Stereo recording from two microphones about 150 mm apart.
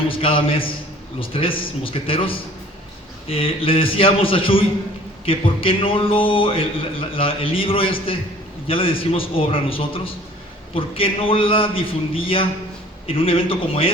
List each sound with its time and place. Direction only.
0.1 s a man's voice: 35° left (ahead or behind)